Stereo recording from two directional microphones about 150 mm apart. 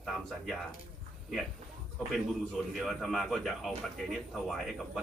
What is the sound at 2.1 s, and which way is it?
A man's voice, centre (ahead or behind).